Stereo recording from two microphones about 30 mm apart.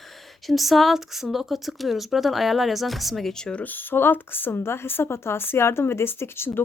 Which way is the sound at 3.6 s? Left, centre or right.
Left.